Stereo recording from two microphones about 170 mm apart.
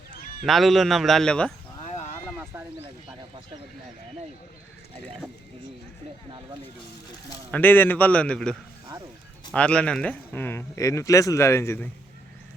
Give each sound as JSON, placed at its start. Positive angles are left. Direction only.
{"t": 0.4, "sound": "a man's voice", "side_deg": 0}
{"t": 1.8, "sound": "a sound", "side_deg": 40}
{"t": 7.5, "sound": "speech", "side_deg": 10}